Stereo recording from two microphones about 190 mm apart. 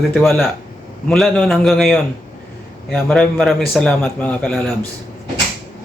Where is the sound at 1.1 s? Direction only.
5° left (ahead or behind).